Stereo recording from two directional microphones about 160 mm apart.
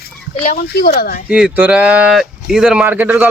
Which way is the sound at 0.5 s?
70° left (ahead or behind).